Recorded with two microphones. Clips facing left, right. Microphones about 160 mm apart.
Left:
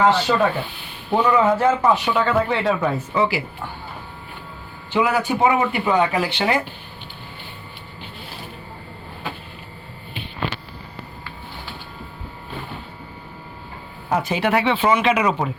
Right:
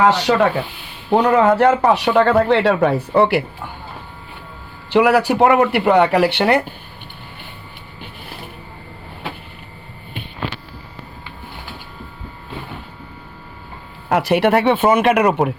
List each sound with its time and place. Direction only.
0.2 s speech: 80° right
1.1 s speech: 65° right (ahead or behind)
4.9 s speech: 75° right (ahead or behind)
14.1 s speech: 75° right (ahead or behind)